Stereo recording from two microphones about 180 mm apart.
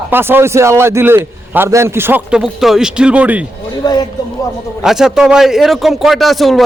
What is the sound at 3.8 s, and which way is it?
Speech, 20° left (ahead or behind).